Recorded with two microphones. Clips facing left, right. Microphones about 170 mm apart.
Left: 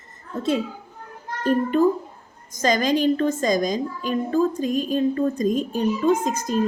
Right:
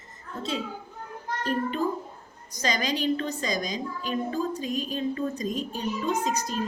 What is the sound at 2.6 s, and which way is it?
A woman's voice, 45° left (ahead or behind).